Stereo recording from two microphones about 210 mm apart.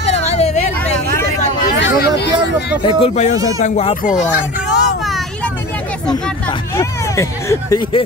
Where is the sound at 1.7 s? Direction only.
55° left (ahead or behind).